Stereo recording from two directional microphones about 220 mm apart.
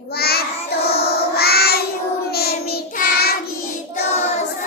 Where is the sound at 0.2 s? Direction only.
45° left (ahead or behind).